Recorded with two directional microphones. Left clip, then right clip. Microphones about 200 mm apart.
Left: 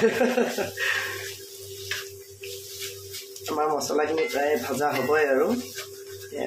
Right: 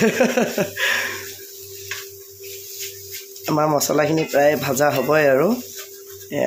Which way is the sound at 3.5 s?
55° right (ahead or behind).